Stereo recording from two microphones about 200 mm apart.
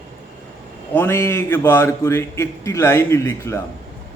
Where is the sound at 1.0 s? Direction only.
10° left (ahead or behind).